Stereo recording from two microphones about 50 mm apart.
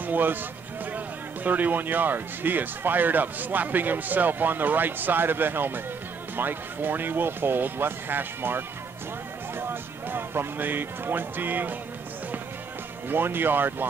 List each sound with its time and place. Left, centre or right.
0.0 s speech: right
13.1 s speech: right